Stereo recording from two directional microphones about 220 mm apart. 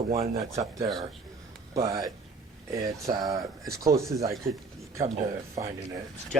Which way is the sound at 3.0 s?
15° right (ahead or behind).